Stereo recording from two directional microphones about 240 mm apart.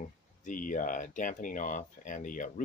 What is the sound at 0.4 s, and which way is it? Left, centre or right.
Speech, left.